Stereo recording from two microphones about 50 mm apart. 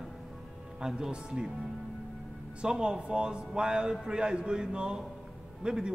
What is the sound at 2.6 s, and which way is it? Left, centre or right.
A man's voice, centre.